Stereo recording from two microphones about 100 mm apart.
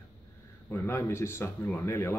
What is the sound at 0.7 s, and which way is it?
Speech, 25° left (ahead or behind).